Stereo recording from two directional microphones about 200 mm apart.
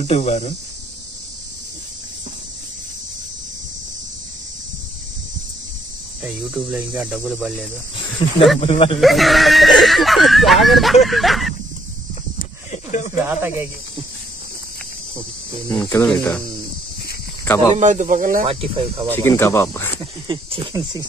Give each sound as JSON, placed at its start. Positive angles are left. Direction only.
{"t": 0.0, "sound": "speech", "side_deg": 30}
{"t": 6.2, "sound": "speech", "side_deg": -5}
{"t": 8.2, "sound": "speech", "side_deg": 30}
{"t": 9.0, "sound": "speech", "side_deg": 0}
{"t": 12.4, "sound": "clip-clop", "side_deg": 35}
{"t": 13.2, "sound": "speech", "side_deg": -10}
{"t": 15.9, "sound": "speech", "side_deg": 5}
{"t": 17.7, "sound": "speech", "side_deg": -40}
{"t": 18.5, "sound": "speech", "side_deg": -30}
{"t": 19.0, "sound": "speech", "side_deg": 10}
{"t": 20.0, "sound": "speech", "side_deg": -25}